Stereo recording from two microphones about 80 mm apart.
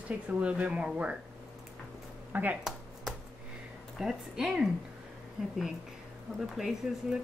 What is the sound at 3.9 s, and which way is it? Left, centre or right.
Speech, centre.